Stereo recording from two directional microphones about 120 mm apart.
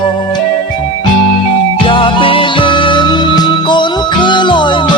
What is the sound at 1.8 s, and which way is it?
Music, 45° left (ahead or behind).